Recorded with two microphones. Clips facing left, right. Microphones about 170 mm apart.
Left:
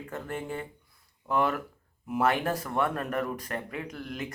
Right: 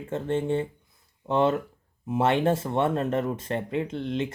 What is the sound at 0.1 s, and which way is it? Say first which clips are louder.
Speech: right 10 dB; 25° right (ahead or behind).